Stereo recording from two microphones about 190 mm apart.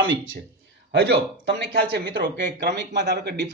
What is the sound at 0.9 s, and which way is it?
Speech, 65° right (ahead or behind).